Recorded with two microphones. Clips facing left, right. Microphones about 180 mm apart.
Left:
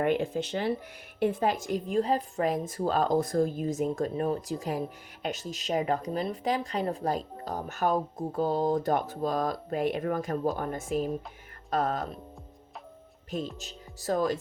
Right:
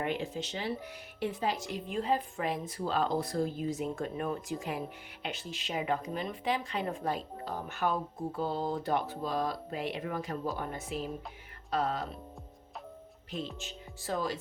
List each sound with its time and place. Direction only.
0.0 s speech: 55° left (ahead or behind)
13.3 s speech: 40° left (ahead or behind)